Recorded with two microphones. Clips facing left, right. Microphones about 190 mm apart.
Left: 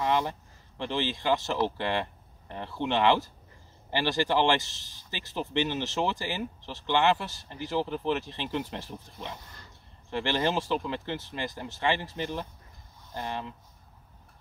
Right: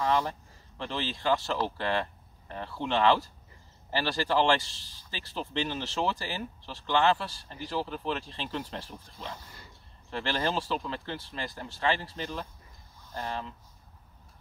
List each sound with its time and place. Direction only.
0.0 s speech: 20° left (ahead or behind)